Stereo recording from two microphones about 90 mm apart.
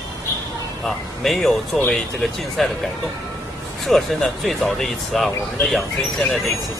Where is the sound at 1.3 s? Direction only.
Centre (ahead or behind).